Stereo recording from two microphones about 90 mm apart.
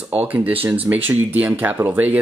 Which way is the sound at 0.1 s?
20° right (ahead or behind).